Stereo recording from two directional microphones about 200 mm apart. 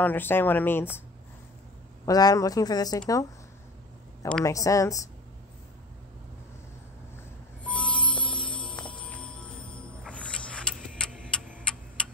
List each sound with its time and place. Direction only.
0.0 s speech: 10° left (ahead or behind)
2.0 s speech: 20° left (ahead or behind)
4.2 s speech: 5° left (ahead or behind)
4.5 s speech: 15° left (ahead or behind)
7.6 s music: 5° left (ahead or behind)
10.1 s a sound: 5° left (ahead or behind)
11.7 s tick-tock: 5° left (ahead or behind)